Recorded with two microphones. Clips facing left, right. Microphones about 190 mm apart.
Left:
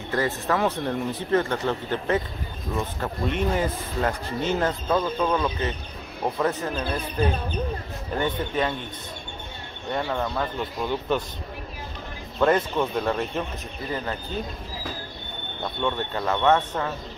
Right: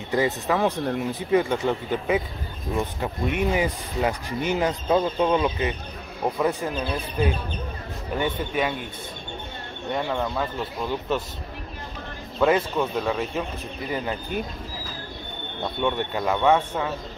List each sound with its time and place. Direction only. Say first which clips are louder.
0.1 s speech: right 2 dB; 15° right (ahead or behind)
8.2 s speech: even; 10° right (ahead or behind)
10.1 s speech: even; centre (ahead or behind)
12.4 s speech: even; 5° right (ahead or behind)
13.9 s speech: right 2 dB; 15° right (ahead or behind)
15.6 s speech: right 2 dB; 10° right (ahead or behind)